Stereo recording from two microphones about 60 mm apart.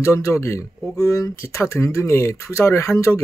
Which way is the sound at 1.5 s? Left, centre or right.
Left.